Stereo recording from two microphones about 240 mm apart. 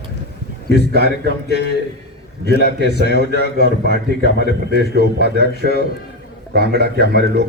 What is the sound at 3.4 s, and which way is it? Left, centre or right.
Speech, left.